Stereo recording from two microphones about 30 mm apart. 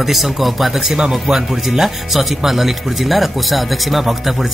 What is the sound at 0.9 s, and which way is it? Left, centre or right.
Speech, centre.